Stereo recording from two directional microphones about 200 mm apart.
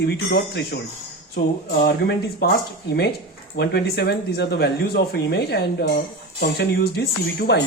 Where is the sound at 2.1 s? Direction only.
50° left (ahead or behind).